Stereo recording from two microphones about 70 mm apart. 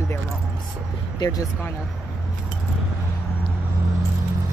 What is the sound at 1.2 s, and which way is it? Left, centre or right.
Speech, left.